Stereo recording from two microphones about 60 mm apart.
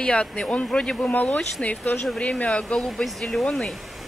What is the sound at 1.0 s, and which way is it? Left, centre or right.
Speech, left.